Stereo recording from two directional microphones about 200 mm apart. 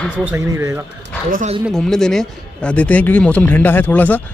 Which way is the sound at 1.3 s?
35° right (ahead or behind).